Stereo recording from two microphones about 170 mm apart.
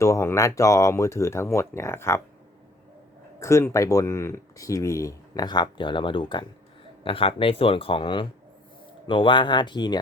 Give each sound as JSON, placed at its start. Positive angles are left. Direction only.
{"t": 0.0, "sound": "speech", "side_deg": 15}
{"t": 3.4, "sound": "speech", "side_deg": 15}